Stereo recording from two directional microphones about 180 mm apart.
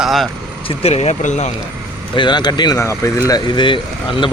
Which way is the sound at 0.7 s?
35° left (ahead or behind).